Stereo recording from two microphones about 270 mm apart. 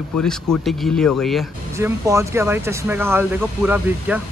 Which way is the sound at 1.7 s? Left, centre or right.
Centre.